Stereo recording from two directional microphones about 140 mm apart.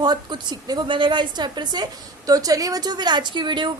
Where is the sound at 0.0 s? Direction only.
30° right (ahead or behind).